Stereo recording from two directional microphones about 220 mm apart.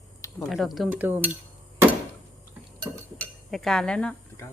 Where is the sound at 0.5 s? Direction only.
Centre (ahead or behind).